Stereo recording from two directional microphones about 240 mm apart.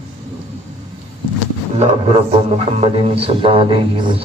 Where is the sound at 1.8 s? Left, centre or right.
Right.